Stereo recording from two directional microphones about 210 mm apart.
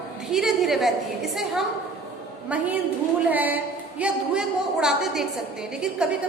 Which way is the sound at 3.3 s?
10° right (ahead or behind).